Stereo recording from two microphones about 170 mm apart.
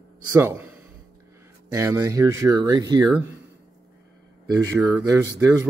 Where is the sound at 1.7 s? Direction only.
15° right (ahead or behind).